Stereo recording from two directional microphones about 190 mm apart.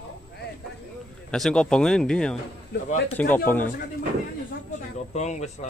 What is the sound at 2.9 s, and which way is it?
Speech, 40° left (ahead or behind).